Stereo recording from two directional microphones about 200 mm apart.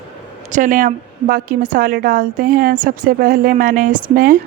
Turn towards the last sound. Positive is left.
turn(degrees=-45)  # may be behind; listen again after turning